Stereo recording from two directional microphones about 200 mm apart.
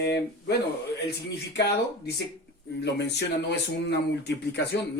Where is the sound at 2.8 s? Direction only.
60° left (ahead or behind).